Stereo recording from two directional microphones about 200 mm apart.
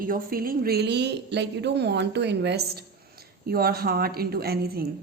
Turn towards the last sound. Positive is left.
turn(degrees=-50)  # may be behind; listen again after turning